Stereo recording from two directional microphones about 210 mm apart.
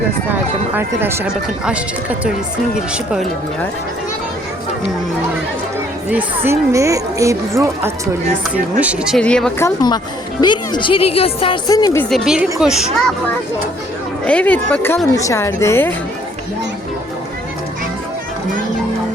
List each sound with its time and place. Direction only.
0.7 s a woman's voice: 10° right (ahead or behind)
6.1 s a woman's voice: 10° right (ahead or behind)
14.3 s a woman's voice: 5° left (ahead or behind)